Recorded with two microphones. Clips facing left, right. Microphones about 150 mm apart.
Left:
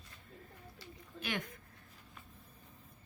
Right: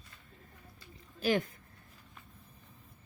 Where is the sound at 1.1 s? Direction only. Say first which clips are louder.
Right 10 dB; 35° right (ahead or behind).